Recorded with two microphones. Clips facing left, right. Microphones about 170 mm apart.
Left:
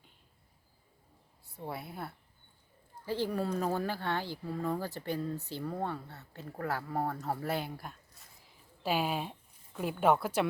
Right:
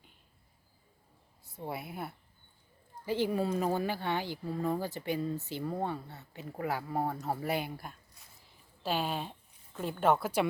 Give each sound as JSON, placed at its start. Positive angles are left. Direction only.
{"t": 1.7, "sound": "speech", "side_deg": -10}
{"t": 5.1, "sound": "speech", "side_deg": 0}
{"t": 7.8, "sound": "a sound", "side_deg": 0}
{"t": 9.7, "sound": "speech", "side_deg": 5}
{"t": 10.2, "sound": "speech", "side_deg": -5}